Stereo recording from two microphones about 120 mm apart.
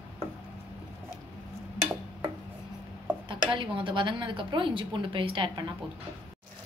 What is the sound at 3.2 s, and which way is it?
Speech, 40° right (ahead or behind).